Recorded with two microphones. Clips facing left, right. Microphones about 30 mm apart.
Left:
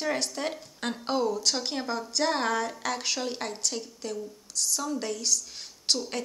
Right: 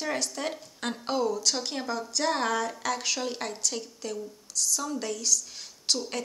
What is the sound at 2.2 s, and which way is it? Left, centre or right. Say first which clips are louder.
Speech: even; centre.